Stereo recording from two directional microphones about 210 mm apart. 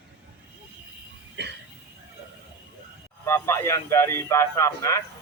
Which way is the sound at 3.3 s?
15° left (ahead or behind).